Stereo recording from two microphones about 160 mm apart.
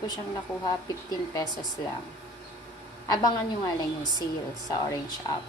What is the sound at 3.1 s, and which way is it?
Speech, 25° left (ahead or behind).